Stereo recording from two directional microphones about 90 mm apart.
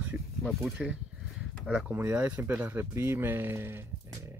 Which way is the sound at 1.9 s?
20° right (ahead or behind).